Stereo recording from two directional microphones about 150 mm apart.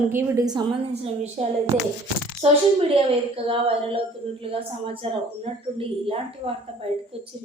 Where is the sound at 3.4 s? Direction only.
40° right (ahead or behind).